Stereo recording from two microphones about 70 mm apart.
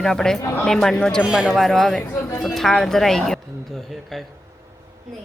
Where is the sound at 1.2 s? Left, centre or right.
Centre.